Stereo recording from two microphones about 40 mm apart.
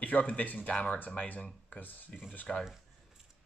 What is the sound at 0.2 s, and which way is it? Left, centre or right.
Speech, left.